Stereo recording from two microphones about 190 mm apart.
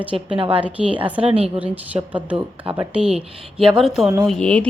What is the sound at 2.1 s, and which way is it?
A woman's voice, 5° right (ahead or behind).